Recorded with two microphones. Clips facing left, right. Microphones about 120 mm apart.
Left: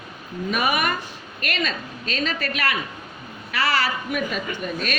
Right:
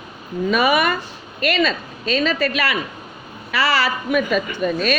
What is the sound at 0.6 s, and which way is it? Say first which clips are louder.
A woman's voice: right 4 dB; 90° right.